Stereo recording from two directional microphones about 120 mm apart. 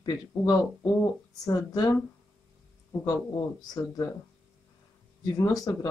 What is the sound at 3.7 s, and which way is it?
Speech, 30° left (ahead or behind).